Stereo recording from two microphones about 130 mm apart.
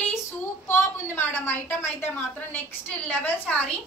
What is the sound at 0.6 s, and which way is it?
A woman's voice, 15° left (ahead or behind).